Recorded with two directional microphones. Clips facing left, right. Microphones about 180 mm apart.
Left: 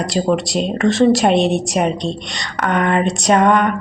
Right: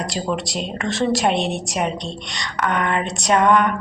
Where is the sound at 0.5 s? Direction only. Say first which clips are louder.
Left 9 dB; 30° left (ahead or behind).